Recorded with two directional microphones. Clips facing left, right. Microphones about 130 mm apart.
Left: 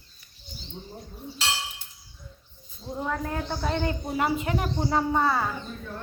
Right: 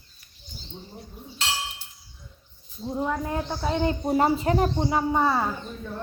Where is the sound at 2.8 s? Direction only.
15° right (ahead or behind).